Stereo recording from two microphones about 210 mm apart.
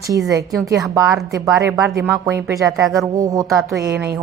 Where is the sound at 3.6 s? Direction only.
5° right (ahead or behind).